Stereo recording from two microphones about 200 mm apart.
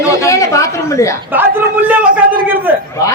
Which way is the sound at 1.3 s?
10° right (ahead or behind).